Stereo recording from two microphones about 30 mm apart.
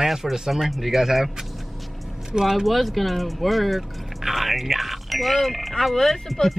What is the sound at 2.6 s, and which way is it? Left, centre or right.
Speech, centre.